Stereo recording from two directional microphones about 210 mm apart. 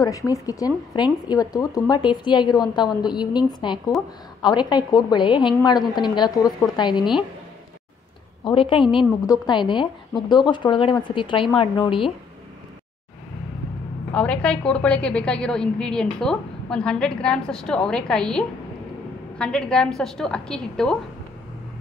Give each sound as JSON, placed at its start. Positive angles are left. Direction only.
{"t": 0.0, "sound": "a woman's voice", "side_deg": 15}
{"t": 8.5, "sound": "a woman's voice", "side_deg": 25}
{"t": 14.1, "sound": "a woman's voice", "side_deg": 5}